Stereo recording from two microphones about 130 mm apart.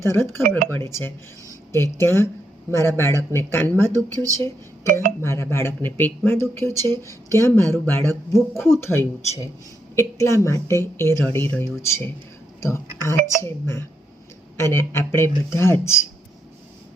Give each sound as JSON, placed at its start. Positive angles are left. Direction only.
{"t": 0.0, "sound": "speech", "side_deg": 20}
{"t": 3.9, "sound": "speech", "side_deg": -25}
{"t": 5.2, "sound": "speech", "side_deg": 20}